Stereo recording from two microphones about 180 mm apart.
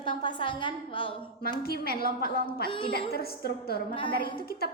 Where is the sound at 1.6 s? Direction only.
60° left (ahead or behind).